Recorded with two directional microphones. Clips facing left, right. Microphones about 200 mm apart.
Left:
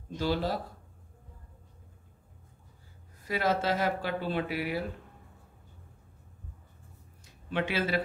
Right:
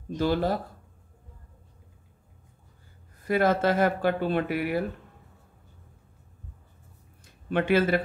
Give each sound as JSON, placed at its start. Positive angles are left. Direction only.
{"t": 0.2, "sound": "speech", "side_deg": -50}
{"t": 3.3, "sound": "speech", "side_deg": -55}
{"t": 7.4, "sound": "speech", "side_deg": -50}